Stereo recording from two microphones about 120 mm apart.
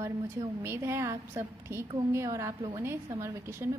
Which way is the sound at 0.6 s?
25° right (ahead or behind).